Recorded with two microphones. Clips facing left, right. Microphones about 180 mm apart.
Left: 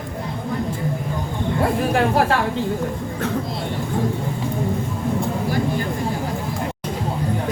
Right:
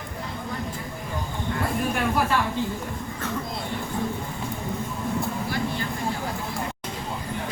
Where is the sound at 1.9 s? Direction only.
75° left (ahead or behind).